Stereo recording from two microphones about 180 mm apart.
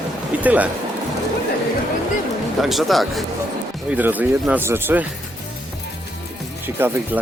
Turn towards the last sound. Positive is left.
turn(degrees=-10)  # may be behind; listen again after turning